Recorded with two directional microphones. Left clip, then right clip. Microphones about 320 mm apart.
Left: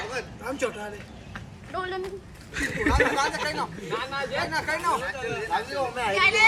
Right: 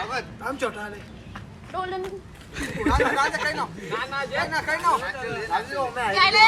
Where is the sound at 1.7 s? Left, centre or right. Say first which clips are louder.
Right 2 dB; centre.